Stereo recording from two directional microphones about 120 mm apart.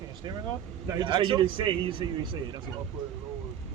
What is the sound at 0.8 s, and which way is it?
A man's voice, 40° right (ahead or behind).